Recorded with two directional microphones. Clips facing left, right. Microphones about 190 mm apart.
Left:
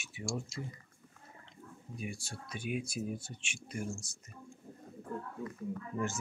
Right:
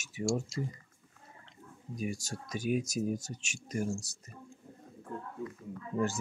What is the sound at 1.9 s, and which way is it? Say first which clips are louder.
Speech: right 6 dB; 40° right (ahead or behind).